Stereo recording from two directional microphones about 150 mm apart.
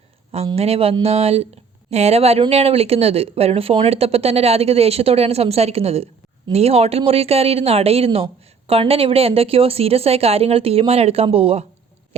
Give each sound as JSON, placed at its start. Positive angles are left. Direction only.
{"t": 0.3, "sound": "speech", "side_deg": -40}